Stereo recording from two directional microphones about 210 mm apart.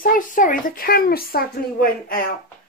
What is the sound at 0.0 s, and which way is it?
Speech, 40° left (ahead or behind).